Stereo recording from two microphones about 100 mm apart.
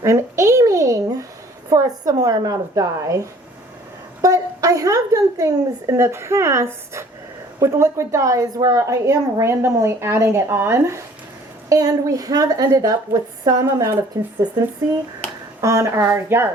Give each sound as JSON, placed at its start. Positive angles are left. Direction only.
{"t": 0.0, "sound": "a sound", "side_deg": -30}
{"t": 1.7, "sound": "a woman's voice", "side_deg": -40}
{"t": 15.6, "sound": "a woman's voice", "side_deg": -35}